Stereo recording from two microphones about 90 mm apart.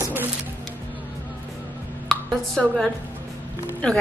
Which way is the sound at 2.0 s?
5° left (ahead or behind).